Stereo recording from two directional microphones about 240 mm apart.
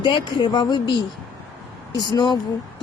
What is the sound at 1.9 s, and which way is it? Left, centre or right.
Speech, centre.